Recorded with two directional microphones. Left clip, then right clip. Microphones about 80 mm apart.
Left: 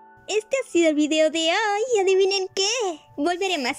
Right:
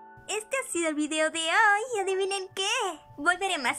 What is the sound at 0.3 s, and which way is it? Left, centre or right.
A child's voice, left.